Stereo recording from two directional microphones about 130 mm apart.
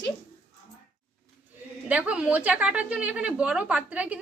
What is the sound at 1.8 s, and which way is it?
A woman's voice, 10° right (ahead or behind).